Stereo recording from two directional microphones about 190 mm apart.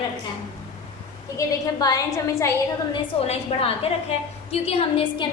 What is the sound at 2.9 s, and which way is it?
A woman's voice, 30° left (ahead or behind).